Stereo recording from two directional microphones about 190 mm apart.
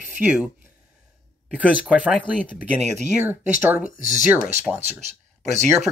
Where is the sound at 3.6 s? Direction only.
5° right (ahead or behind).